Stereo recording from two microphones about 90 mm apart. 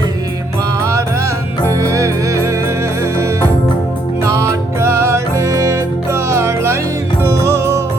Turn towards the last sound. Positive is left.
turn(degrees=-30)  # may be behind; listen again after turning